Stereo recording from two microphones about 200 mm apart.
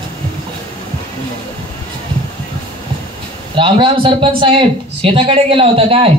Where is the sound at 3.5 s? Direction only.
25° right (ahead or behind).